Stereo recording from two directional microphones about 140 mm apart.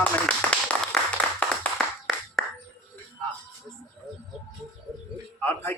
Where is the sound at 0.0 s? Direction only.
10° left (ahead or behind).